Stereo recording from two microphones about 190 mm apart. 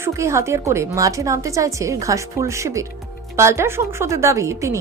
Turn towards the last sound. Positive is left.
turn(degrees=-15)  # may be behind; listen again after turning